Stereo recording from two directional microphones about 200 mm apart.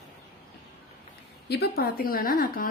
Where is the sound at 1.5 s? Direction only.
50° left (ahead or behind).